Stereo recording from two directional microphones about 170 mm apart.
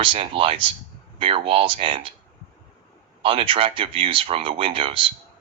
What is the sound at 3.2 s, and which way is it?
Speech, 30° right (ahead or behind).